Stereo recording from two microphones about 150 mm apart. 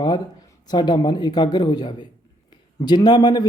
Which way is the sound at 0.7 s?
30° left (ahead or behind).